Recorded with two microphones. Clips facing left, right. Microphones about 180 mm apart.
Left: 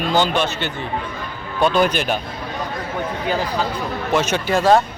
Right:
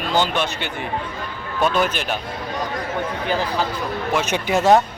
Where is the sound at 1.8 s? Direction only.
Centre (ahead or behind).